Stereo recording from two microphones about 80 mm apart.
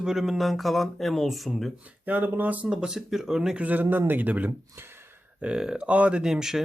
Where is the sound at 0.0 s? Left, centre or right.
Centre.